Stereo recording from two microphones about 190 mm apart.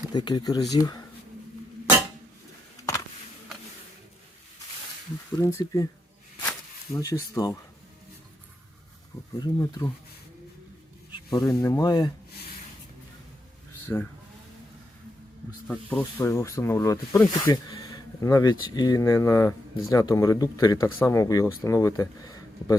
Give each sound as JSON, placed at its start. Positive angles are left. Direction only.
{"t": 0.1, "sound": "speech", "side_deg": 20}
{"t": 5.4, "sound": "speech", "side_deg": 15}
{"t": 6.9, "sound": "speech", "side_deg": 20}
{"t": 9.4, "sound": "speech", "side_deg": 15}
{"t": 11.1, "sound": "speech", "side_deg": 25}
{"t": 13.8, "sound": "speech", "side_deg": 10}
{"t": 15.7, "sound": "speech", "side_deg": 10}